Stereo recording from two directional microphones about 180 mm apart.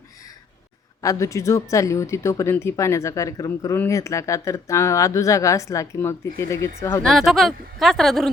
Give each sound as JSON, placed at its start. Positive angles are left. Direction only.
{"t": 1.0, "sound": "speech", "side_deg": 15}
{"t": 7.0, "sound": "speech", "side_deg": 0}